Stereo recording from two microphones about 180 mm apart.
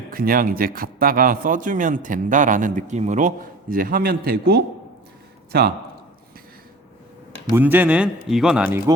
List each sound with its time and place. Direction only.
0.1 s a man's voice: 55° right (ahead or behind)
7.5 s speech: 10° right (ahead or behind)